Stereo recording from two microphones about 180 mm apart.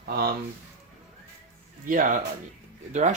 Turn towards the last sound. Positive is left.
turn(degrees=-40)  # may be behind; listen again after turning